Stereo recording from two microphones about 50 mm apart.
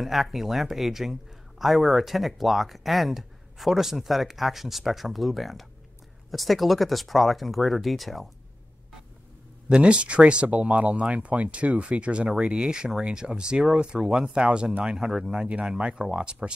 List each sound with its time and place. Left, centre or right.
0.0 s speech: centre
9.7 s speech: right